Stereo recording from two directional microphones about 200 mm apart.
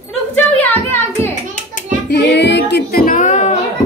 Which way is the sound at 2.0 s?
60° left (ahead or behind).